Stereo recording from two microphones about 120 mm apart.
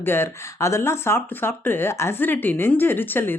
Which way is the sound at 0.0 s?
20° left (ahead or behind).